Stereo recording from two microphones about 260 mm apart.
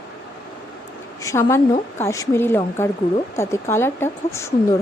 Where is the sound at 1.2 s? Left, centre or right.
Centre.